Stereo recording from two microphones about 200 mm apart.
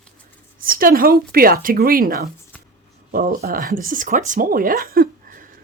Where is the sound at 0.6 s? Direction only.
45° right (ahead or behind).